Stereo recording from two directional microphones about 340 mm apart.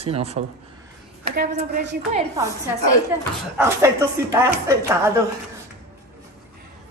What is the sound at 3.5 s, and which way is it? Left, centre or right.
Speech, centre.